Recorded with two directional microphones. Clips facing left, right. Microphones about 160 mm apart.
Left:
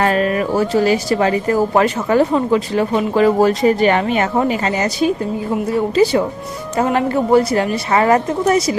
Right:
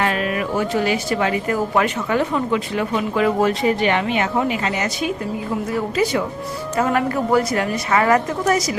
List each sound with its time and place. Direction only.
0.0 s a woman's voice: 40° left (ahead or behind)